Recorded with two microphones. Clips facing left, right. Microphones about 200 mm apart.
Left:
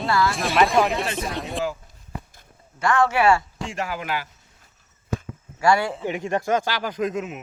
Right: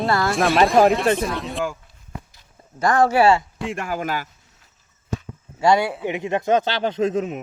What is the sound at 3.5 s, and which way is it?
Speech, 55° right (ahead or behind).